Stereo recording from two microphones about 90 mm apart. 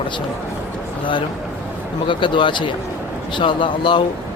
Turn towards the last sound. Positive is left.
turn(degrees=65)  # may be behind; listen again after turning